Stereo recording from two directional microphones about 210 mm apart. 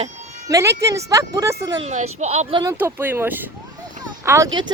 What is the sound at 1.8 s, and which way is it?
Speech, 30° right (ahead or behind).